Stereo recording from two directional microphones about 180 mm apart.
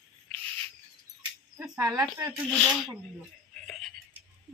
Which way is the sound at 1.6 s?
15° right (ahead or behind).